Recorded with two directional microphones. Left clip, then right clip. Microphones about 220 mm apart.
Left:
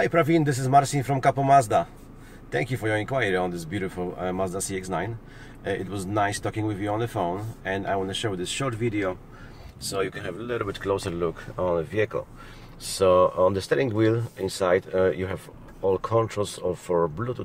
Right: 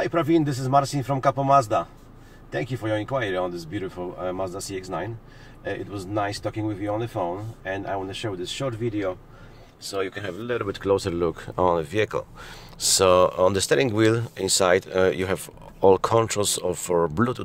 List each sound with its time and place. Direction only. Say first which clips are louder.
0.1 s speech: even; 5° left (ahead or behind)
10.0 s speech: right 2 dB; 25° right (ahead or behind); by 17.4 s 40° right (ahead or behind)